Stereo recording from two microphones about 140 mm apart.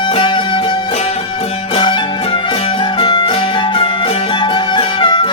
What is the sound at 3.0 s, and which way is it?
Music, 35° left (ahead or behind).